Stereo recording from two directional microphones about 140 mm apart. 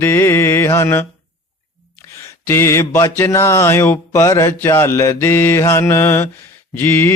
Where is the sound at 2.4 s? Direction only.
20° left (ahead or behind).